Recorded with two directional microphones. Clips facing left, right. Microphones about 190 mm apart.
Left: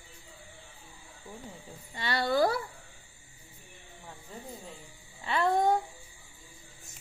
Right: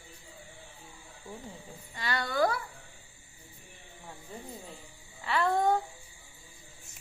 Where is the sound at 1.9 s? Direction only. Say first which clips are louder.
Left 3 dB; 30° left (ahead or behind).